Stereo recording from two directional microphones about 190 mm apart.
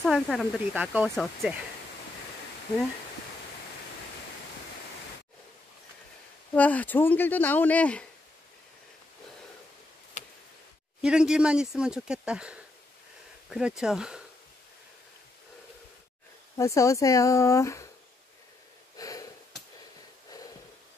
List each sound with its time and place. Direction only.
0.0 s speech: centre (ahead or behind)
6.5 s speech: 10° left (ahead or behind)
11.0 s speech: 5° right (ahead or behind)
16.5 s speech: 15° left (ahead or behind)
18.9 s wheeze: 20° left (ahead or behind)